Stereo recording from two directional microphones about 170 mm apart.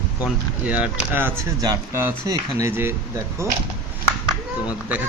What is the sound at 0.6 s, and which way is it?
Speech, 10° right (ahead or behind).